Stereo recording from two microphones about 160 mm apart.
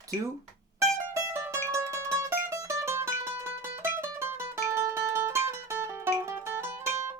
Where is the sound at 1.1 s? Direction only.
15° right (ahead or behind).